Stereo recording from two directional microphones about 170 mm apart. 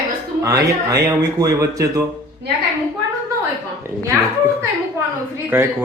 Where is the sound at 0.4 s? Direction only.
20° right (ahead or behind).